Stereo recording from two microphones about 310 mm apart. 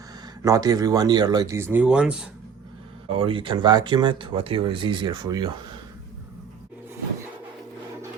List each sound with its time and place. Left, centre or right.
0.4 s speech: centre
3.1 s speech: centre